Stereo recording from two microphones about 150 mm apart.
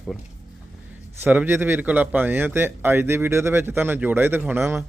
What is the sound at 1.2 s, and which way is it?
Speech, 15° right (ahead or behind).